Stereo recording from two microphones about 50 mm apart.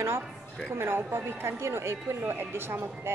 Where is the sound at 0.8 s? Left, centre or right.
Right.